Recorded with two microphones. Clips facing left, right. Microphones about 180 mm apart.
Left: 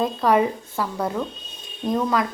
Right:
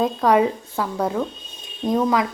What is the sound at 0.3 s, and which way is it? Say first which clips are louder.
A woman's voice: right 1 dB; 10° right (ahead or behind).